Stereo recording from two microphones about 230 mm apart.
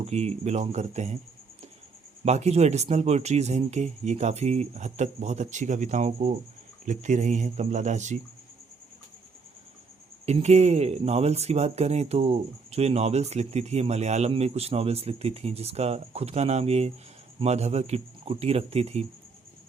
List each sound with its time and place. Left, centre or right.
0.0 s speech: right
2.2 s speech: right
10.2 s speech: right